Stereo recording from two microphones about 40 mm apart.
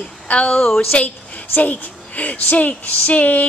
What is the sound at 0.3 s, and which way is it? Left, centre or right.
Speech, left.